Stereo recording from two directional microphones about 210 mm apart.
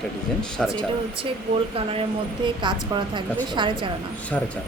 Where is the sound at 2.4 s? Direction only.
20° right (ahead or behind).